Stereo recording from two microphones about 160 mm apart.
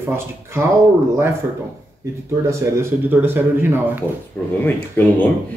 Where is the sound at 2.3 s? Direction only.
20° right (ahead or behind).